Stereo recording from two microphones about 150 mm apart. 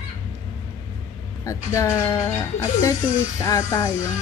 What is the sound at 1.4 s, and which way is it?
Speech, 20° left (ahead or behind).